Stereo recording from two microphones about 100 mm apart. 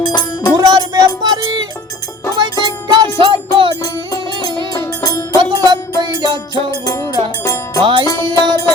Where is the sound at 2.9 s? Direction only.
55° right (ahead or behind).